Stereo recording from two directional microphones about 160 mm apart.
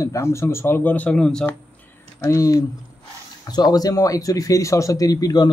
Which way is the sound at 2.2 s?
20° left (ahead or behind).